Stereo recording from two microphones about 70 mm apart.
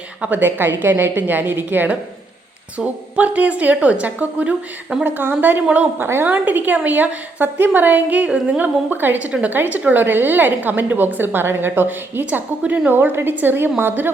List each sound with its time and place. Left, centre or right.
0.2 s a woman's voice: right